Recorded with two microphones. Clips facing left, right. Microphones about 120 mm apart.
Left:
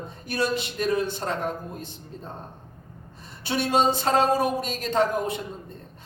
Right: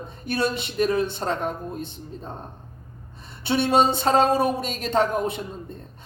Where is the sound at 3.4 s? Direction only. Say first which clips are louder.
Right 3 dB; 25° right (ahead or behind).